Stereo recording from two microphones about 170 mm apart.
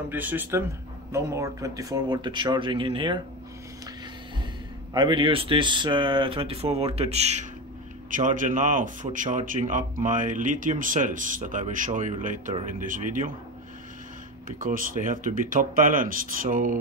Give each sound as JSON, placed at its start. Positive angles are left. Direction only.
{"t": 0.1, "sound": "speech", "side_deg": -10}
{"t": 4.9, "sound": "speech", "side_deg": -25}
{"t": 14.6, "sound": "speech", "side_deg": -55}